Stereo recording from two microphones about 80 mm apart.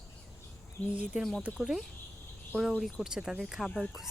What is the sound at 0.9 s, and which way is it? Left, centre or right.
Speech, centre.